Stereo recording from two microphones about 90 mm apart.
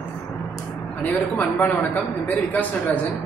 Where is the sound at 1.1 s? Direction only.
20° left (ahead or behind).